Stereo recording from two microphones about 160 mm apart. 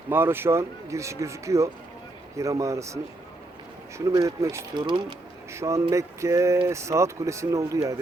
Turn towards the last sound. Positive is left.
turn(degrees=-20)  # may be behind; listen again after turning